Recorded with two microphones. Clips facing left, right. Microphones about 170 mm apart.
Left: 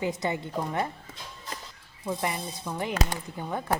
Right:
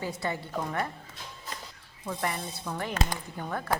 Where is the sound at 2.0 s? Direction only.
15° left (ahead or behind).